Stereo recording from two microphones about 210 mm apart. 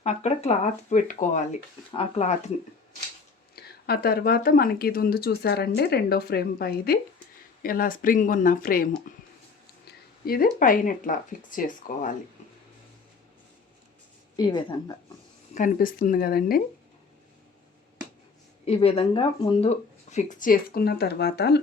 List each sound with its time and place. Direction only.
0.0 s speech: 30° left (ahead or behind)
3.5 s speech: 45° left (ahead or behind)
14.3 s speech: 20° left (ahead or behind)
15.5 s speech: 40° left (ahead or behind)
18.6 s speech: 30° left (ahead or behind); by 21.6 s 50° left (ahead or behind)